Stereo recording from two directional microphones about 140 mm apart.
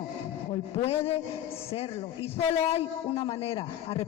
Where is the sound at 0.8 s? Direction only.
45° left (ahead or behind).